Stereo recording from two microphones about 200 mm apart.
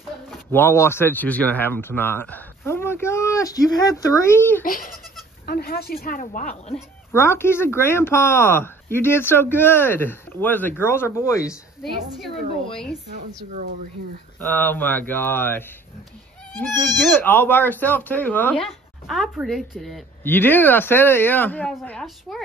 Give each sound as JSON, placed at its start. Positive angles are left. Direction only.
{"t": 0.5, "sound": "speech", "side_deg": 10}
{"t": 4.6, "sound": "speech", "side_deg": 45}
{"t": 7.1, "sound": "speech", "side_deg": 10}
{"t": 12.7, "sound": "speech", "side_deg": 5}
{"t": 14.5, "sound": "speech", "side_deg": 10}
{"t": 17.1, "sound": "speech", "side_deg": 10}